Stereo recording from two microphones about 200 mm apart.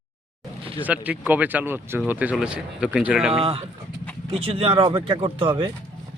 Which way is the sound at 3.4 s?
30° right (ahead or behind).